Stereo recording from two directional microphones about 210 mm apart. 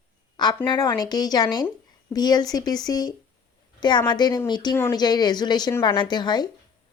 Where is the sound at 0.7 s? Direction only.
20° left (ahead or behind).